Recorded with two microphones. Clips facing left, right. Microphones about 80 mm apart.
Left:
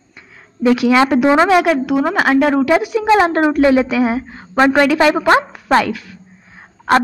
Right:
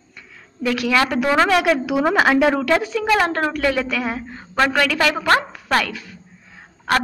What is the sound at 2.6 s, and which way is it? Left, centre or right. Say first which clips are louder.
A woman's voice: left 5 dB; centre.